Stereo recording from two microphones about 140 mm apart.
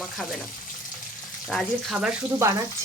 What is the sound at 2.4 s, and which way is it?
Speech, 20° right (ahead or behind).